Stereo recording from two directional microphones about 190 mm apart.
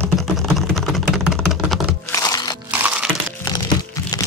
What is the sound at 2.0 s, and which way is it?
Music, 20° left (ahead or behind).